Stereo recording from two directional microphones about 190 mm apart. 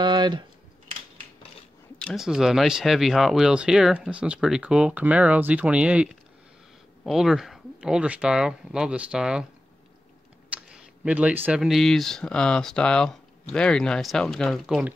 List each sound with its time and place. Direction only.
0.0 s a sound: 25° right (ahead or behind)
2.0 s speech: centre (ahead or behind)
7.1 s speech: centre (ahead or behind)
10.5 s speech: 5° right (ahead or behind)